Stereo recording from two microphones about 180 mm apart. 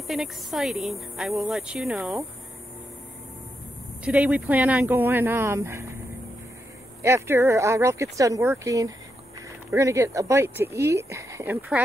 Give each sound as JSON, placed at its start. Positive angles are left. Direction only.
{"t": 0.0, "sound": "a woman's voice", "side_deg": 0}
{"t": 4.0, "sound": "speech", "side_deg": -5}
{"t": 7.0, "sound": "speech", "side_deg": -15}